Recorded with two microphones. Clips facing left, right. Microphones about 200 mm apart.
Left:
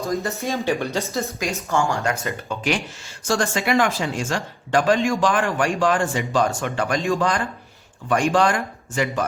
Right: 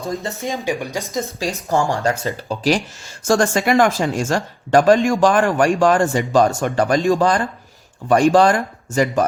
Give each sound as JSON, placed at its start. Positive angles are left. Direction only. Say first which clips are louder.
{"t": 0.4, "sound": "speech", "louder": "right 1 dB", "side_deg": -15}
{"t": 1.4, "sound": "speech", "louder": "right 4 dB", "side_deg": -35}
{"t": 3.2, "sound": "speech", "louder": "right 5 dB", "side_deg": -45}